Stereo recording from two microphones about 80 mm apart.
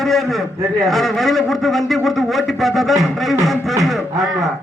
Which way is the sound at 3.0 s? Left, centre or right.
Right.